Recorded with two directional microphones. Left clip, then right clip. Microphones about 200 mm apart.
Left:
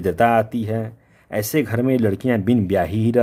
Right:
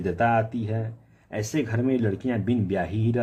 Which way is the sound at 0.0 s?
55° left (ahead or behind).